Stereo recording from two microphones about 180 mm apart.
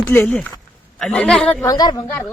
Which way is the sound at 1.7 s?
20° left (ahead or behind).